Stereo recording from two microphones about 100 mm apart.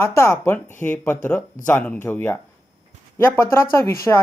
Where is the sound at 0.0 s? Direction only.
25° left (ahead or behind).